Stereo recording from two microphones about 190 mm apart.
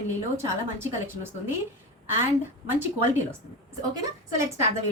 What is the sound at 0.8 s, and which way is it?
Speech, 10° right (ahead or behind).